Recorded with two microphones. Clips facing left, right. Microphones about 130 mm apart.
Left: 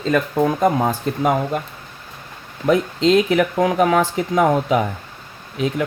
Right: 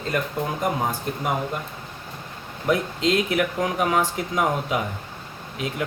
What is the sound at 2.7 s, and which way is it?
Speech, 90° left.